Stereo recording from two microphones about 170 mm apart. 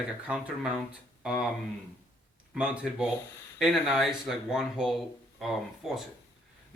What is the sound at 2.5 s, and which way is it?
Speech, 5° right (ahead or behind).